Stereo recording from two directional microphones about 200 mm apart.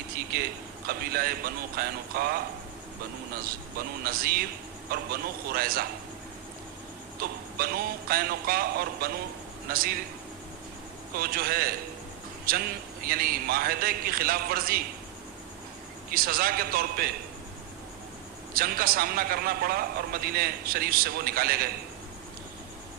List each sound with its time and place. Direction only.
0.9 s a man's voice: 50° right (ahead or behind)
7.2 s a man's voice: 50° right (ahead or behind)
11.2 s a man's voice: 50° right (ahead or behind)
16.1 s a man's voice: 45° right (ahead or behind)
18.5 s a man's voice: 45° right (ahead or behind)